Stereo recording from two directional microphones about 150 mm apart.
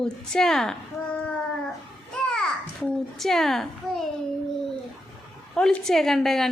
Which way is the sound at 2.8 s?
5° left (ahead or behind).